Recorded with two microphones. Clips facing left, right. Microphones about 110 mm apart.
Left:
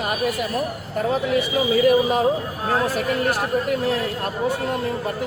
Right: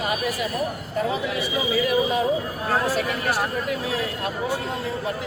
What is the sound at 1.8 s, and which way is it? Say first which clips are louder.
Speech: left 5 dB; 45° left (ahead or behind).